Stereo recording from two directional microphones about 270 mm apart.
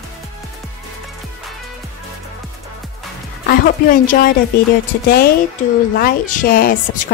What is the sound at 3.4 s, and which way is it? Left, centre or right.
A woman's voice, left.